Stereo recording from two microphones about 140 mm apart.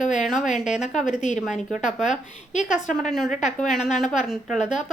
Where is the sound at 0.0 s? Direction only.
60° left (ahead or behind).